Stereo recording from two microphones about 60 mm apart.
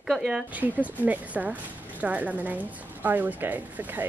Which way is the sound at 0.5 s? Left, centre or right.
Right.